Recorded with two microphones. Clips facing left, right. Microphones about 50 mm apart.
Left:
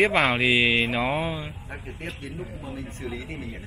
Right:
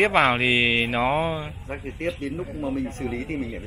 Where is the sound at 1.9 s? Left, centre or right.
Right.